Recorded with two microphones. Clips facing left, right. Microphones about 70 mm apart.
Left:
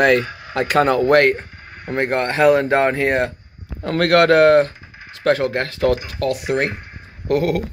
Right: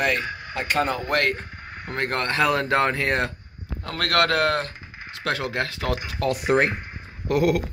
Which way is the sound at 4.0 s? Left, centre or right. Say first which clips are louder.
Left 9 dB; left.